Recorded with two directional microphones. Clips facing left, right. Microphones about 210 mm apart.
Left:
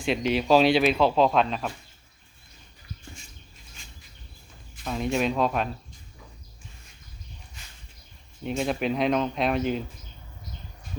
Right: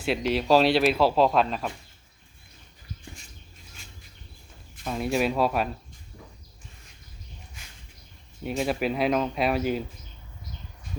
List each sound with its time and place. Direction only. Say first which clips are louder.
0.0 s speech: left 1 dB; 5° right (ahead or behind)
4.8 s speech: even; 5° right (ahead or behind)
8.4 s speech: even; 5° right (ahead or behind)